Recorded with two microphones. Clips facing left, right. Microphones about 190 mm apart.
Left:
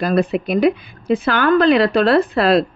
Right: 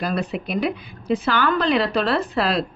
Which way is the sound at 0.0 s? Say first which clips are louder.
Left 8 dB; 55° left (ahead or behind).